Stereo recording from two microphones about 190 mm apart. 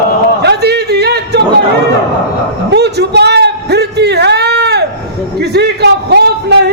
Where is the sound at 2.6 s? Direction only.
60° right (ahead or behind).